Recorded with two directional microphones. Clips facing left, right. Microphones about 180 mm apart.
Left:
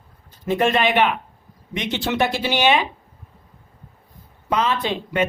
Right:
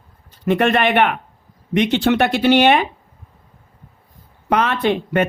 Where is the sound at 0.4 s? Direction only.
65° right (ahead or behind).